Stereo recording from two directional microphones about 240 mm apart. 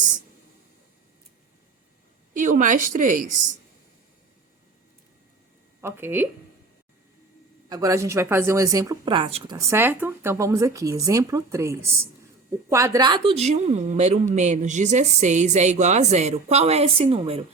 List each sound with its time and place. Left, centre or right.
2.3 s a woman's voice: right
5.8 s speech: centre
7.7 s a woman's voice: centre